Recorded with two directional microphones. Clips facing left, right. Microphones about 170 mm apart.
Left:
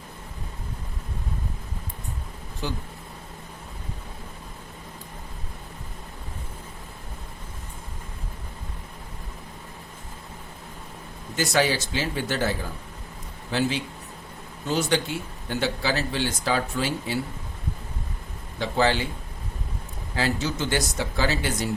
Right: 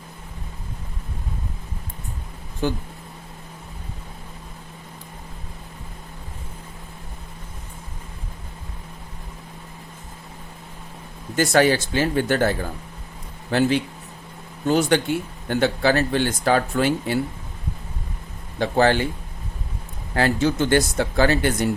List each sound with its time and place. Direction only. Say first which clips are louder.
2.6 s speech: right 7 dB; 55° right (ahead or behind)
11.3 s speech: right 6 dB; 55° right (ahead or behind)
18.6 s speech: right 5 dB; 55° right (ahead or behind)
20.1 s speech: right 6 dB; 55° right (ahead or behind)